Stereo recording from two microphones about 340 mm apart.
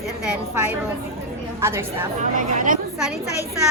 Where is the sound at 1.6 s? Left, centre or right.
Centre.